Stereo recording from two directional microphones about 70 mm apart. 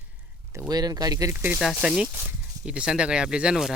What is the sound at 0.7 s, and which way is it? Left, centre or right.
Speech, right.